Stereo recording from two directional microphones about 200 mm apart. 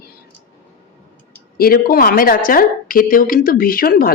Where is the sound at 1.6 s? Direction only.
45° left (ahead or behind).